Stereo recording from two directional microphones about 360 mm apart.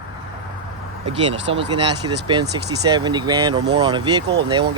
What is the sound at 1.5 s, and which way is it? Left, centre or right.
Speech, centre.